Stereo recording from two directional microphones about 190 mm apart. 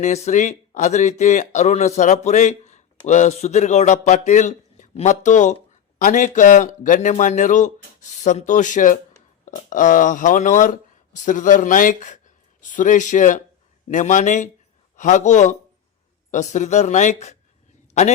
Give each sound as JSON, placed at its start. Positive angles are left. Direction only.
{"t": 0.0, "sound": "speech", "side_deg": 35}